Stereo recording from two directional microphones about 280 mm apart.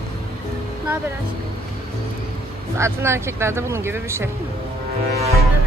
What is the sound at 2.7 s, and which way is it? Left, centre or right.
Speech, centre.